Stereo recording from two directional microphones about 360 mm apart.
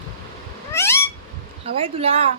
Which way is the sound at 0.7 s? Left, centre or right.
Centre.